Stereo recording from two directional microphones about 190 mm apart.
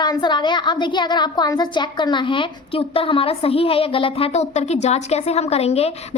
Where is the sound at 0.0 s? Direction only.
25° left (ahead or behind).